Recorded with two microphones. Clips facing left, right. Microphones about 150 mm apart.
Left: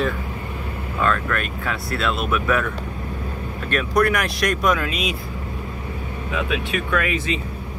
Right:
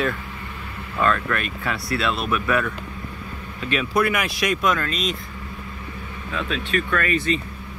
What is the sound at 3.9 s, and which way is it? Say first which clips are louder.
Speech: left 3 dB; 5° right (ahead or behind).